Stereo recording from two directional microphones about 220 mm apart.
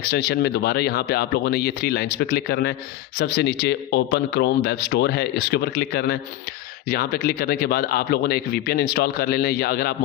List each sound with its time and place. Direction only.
0.0 s speech: 45° left (ahead or behind)